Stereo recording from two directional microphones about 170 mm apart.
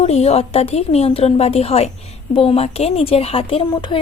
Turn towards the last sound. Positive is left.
turn(degrees=30)  # may be behind; listen again after turning